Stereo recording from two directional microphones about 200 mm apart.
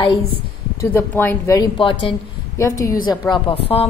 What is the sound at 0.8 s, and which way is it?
A woman's voice, 10° left (ahead or behind).